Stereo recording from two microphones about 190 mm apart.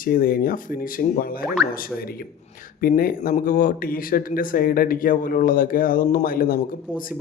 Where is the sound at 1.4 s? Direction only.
Centre (ahead or behind).